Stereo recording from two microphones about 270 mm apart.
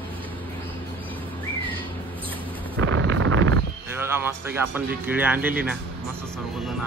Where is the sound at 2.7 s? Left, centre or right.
Right.